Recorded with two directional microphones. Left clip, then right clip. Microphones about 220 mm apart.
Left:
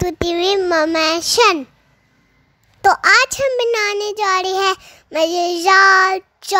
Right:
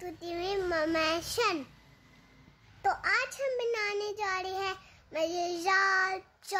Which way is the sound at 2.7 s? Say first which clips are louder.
Left 17 dB; 45° left (ahead or behind).